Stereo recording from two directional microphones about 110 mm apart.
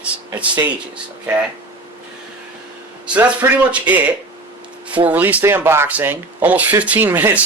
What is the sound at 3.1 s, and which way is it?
Speech, 10° right (ahead or behind).